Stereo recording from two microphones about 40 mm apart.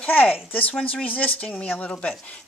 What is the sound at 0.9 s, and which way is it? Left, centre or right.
Speech, left.